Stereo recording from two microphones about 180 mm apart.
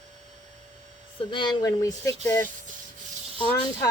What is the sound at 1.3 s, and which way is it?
Speech, 25° left (ahead or behind).